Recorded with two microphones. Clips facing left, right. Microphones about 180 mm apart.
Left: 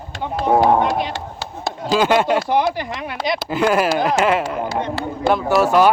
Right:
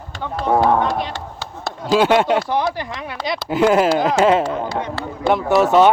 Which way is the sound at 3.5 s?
20° right (ahead or behind).